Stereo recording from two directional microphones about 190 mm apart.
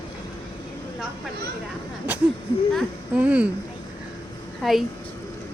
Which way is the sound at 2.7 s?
5° right (ahead or behind).